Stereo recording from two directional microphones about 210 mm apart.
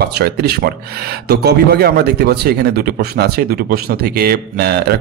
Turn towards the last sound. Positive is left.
turn(degrees=-50)  # may be behind; listen again after turning